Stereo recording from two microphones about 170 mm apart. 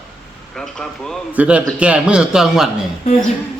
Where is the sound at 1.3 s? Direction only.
10° right (ahead or behind).